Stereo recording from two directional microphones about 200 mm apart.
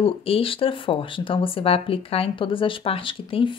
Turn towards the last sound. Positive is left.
turn(degrees=25)  # may be behind; listen again after turning